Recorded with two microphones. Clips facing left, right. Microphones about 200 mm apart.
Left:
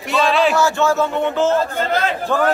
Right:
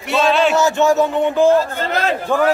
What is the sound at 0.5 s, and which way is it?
A man's voice, 20° right (ahead or behind).